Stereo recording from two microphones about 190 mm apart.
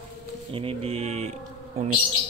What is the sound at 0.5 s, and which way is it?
Speech, 30° right (ahead or behind).